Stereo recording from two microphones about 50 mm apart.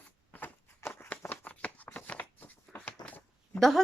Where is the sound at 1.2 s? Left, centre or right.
Left.